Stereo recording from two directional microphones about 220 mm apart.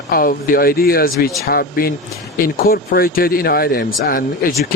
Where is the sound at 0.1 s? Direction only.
40° left (ahead or behind).